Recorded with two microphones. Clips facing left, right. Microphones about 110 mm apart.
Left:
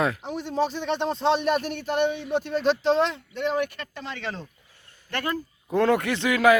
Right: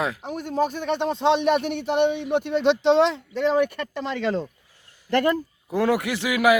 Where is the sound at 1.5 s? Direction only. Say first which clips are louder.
Right 3 dB; 70° right (ahead or behind).